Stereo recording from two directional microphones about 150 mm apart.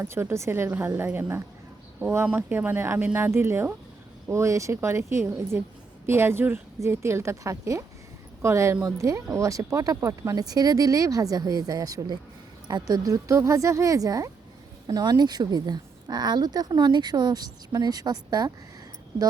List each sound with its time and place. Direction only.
0.0 s speech: 15° right (ahead or behind)